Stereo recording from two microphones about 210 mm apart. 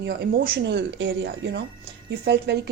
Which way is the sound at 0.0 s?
50° right (ahead or behind).